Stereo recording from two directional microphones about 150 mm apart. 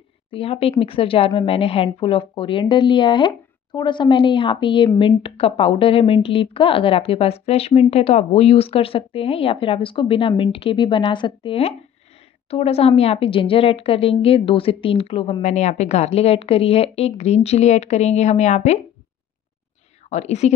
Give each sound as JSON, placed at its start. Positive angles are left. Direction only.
{"t": 0.3, "sound": "a woman's voice", "side_deg": 40}
{"t": 20.1, "sound": "a woman's voice", "side_deg": 50}